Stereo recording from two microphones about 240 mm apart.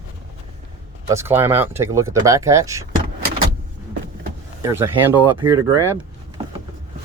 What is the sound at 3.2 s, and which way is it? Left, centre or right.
Vehicle, right.